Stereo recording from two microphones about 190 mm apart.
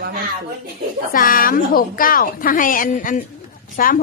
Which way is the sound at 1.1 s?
50° left (ahead or behind).